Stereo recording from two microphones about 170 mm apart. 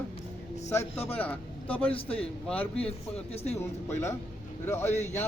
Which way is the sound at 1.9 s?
35° left (ahead or behind).